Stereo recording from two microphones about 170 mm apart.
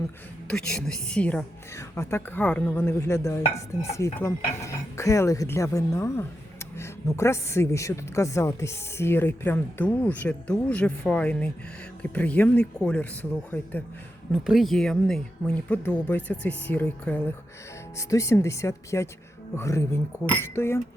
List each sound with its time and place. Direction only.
0.4 s speech: 5° left (ahead or behind)